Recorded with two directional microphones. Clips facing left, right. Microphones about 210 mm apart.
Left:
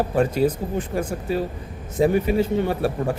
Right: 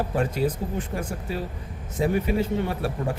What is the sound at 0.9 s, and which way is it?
Speech, 35° left (ahead or behind).